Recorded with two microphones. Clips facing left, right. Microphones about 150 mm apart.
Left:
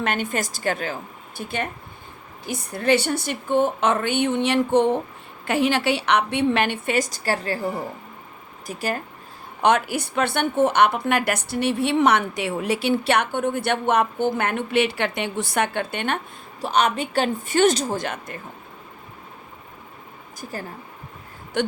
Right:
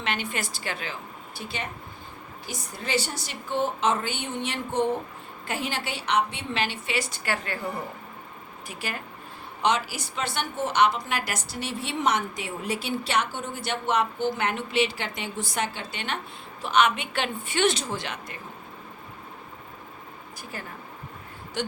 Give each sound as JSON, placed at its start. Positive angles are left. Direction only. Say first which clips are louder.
{"t": 0.0, "sound": "a woman's voice", "louder": "left 6 dB", "side_deg": 45}
{"t": 8.6, "sound": "a woman's voice", "louder": "left 8 dB", "side_deg": 40}
{"t": 9.6, "sound": "a woman's voice", "louder": "left 6 dB", "side_deg": 55}
{"t": 16.6, "sound": "a woman's voice", "louder": "left 2 dB", "side_deg": 40}
{"t": 20.4, "sound": "a woman's voice", "louder": "left 6 dB", "side_deg": 40}